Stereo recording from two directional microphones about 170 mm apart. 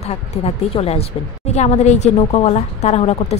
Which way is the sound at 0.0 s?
35° left (ahead or behind).